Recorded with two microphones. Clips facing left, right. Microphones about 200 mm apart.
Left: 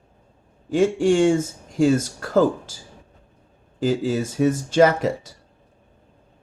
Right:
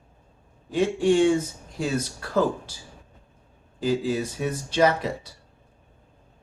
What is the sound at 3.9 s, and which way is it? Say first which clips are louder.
Speech: left 2 dB; 45° left (ahead or behind).